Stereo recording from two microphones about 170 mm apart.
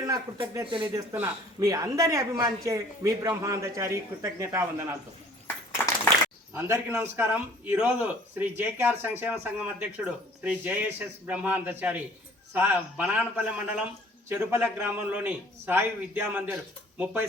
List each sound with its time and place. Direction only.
0.0 s a man's voice: 20° right (ahead or behind)
6.5 s a man's voice: 15° right (ahead or behind)